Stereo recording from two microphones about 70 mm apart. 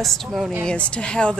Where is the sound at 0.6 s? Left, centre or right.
Centre.